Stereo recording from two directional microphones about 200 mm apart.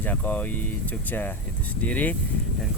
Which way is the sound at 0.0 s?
10° left (ahead or behind).